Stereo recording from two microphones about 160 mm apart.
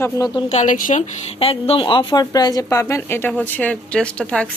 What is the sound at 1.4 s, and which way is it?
A woman's voice, 35° left (ahead or behind).